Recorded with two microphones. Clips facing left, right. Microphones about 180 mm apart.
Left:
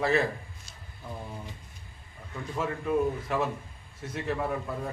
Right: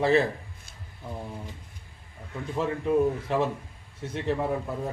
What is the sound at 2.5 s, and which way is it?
A man's voice, 25° right (ahead or behind).